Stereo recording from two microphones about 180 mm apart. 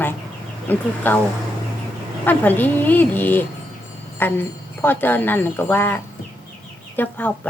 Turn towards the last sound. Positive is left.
turn(degrees=10)  # may be behind; listen again after turning